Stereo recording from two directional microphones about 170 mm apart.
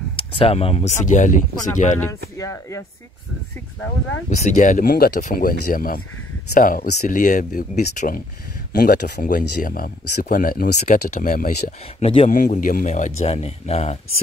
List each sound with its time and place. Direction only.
0.1 s speech: 30° left (ahead or behind); by 2.0 s 45° left (ahead or behind)
2.0 s speech: 15° left (ahead or behind)
4.5 s speech: 50° left (ahead or behind)
8.7 s speech: 65° left (ahead or behind)
12.0 s speech: 35° left (ahead or behind)
12.3 s speech: 50° left (ahead or behind)